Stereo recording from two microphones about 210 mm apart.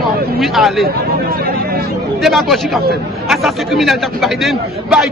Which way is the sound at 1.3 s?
45° right (ahead or behind).